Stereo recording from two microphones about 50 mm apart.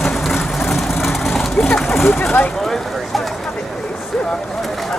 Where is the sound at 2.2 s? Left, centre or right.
Left.